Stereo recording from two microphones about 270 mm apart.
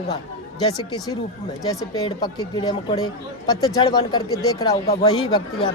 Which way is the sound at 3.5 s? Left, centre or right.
Centre.